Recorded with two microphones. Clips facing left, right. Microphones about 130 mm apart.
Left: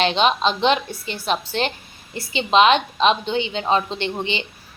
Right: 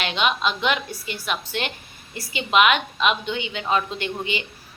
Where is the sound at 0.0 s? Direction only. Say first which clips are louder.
Left 5 dB; 30° left (ahead or behind).